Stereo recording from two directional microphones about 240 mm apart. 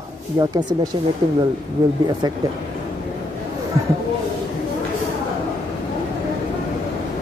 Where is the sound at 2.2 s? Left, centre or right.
Centre.